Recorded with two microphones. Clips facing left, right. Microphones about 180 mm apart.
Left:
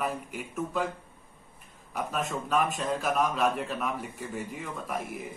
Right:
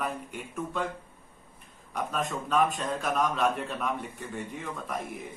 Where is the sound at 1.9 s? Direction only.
5° left (ahead or behind).